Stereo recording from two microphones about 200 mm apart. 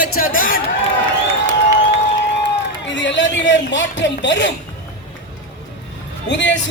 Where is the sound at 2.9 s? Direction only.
65° left (ahead or behind).